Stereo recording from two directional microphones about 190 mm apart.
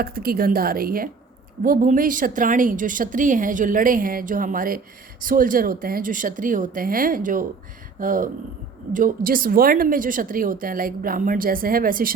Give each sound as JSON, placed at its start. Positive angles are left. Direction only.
{"t": 0.0, "sound": "speech", "side_deg": -50}